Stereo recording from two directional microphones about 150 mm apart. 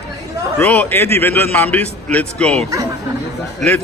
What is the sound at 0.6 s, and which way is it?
A man's voice, 10° left (ahead or behind).